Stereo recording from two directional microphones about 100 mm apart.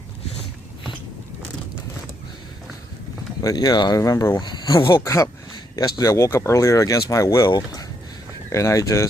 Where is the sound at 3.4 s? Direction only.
40° left (ahead or behind).